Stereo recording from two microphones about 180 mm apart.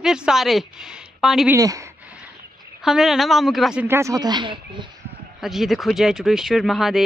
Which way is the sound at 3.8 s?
15° right (ahead or behind).